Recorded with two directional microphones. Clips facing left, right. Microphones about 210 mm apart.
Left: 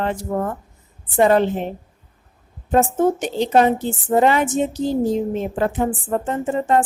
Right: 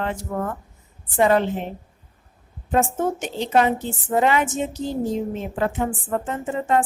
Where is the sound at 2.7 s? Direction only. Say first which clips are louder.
Left 5 dB; 35° left (ahead or behind).